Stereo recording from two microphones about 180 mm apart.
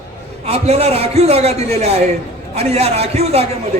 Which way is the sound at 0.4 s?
35° right (ahead or behind).